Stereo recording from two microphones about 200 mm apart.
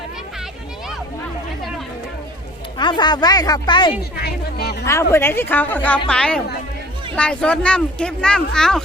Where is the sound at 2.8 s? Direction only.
20° left (ahead or behind).